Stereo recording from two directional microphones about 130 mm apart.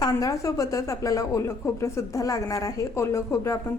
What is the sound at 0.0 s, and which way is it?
A woman's voice, 25° left (ahead or behind).